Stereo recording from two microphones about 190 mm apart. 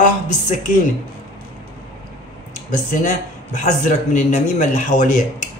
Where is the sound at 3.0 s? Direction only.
40° left (ahead or behind).